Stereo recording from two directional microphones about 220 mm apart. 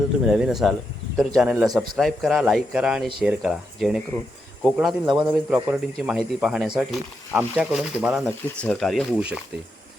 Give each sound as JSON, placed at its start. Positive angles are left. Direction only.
{"t": 0.3, "sound": "speech", "side_deg": 0}